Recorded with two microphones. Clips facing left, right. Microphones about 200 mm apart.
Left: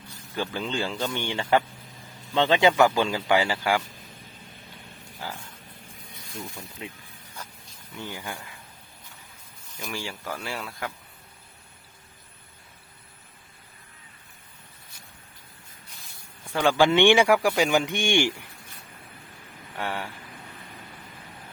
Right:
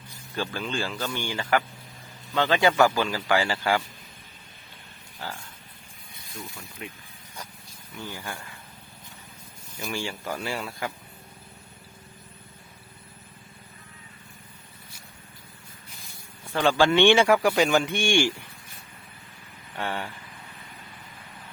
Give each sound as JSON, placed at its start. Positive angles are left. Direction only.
{"t": 0.3, "sound": "speech", "side_deg": 20}
{"t": 5.2, "sound": "speech", "side_deg": 15}
{"t": 6.8, "sound": "speech", "side_deg": 25}
{"t": 8.0, "sound": "speech", "side_deg": 15}
{"t": 9.8, "sound": "speech", "side_deg": 0}
{"t": 16.6, "sound": "speech", "side_deg": 15}
{"t": 19.8, "sound": "speech", "side_deg": 5}